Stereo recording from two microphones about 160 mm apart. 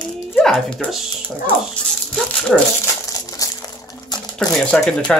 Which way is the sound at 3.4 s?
20° left (ahead or behind).